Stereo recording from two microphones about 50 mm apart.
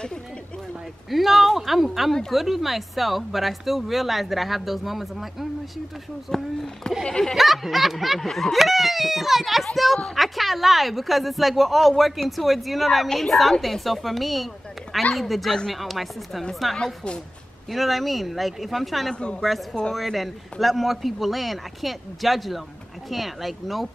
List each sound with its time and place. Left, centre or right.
1.1 s a woman's voice: centre
6.3 s speech: centre
7.3 s a woman's voice: centre
16.7 s speech: centre
17.6 s a woman's voice: centre